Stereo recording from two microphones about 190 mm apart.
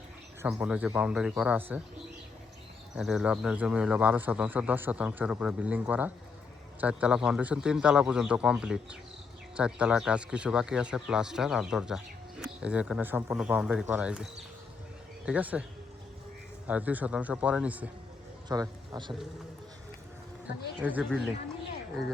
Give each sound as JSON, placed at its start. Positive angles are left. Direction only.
{"t": 0.4, "sound": "speech", "side_deg": -5}
{"t": 2.9, "sound": "speech", "side_deg": 0}
{"t": 15.3, "sound": "speech", "side_deg": -5}
{"t": 16.6, "sound": "speech", "side_deg": -10}
{"t": 18.4, "sound": "speech", "side_deg": -20}
{"t": 20.8, "sound": "speech", "side_deg": -10}